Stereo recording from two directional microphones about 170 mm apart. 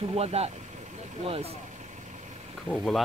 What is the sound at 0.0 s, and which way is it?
Vehicle, 35° right (ahead or behind).